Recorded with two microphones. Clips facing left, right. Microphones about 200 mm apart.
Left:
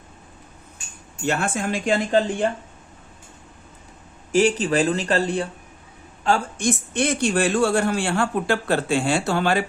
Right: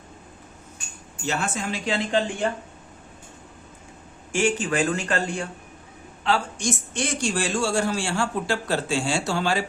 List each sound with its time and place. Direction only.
1.2 s speech: 55° left (ahead or behind)
4.3 s speech: 40° left (ahead or behind)
6.2 s a woman's voice: 50° left (ahead or behind)